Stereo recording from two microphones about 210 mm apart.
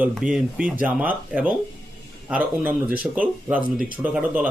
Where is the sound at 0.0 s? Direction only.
5° right (ahead or behind).